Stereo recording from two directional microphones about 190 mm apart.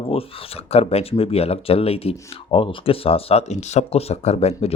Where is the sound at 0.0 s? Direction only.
30° left (ahead or behind).